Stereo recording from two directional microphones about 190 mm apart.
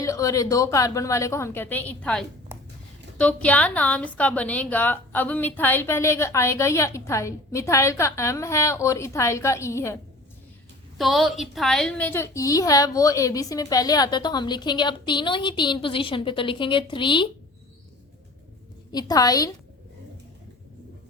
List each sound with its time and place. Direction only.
0.0 s a woman's voice: 15° left (ahead or behind)
10.9 s a woman's voice: centre (ahead or behind); by 17.2 s 25° left (ahead or behind)
18.9 s a woman's voice: 20° left (ahead or behind)